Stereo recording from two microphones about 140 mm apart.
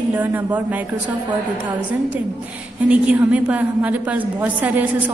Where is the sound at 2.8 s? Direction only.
10° right (ahead or behind).